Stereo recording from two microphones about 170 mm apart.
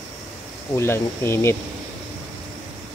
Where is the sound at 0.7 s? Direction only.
15° left (ahead or behind).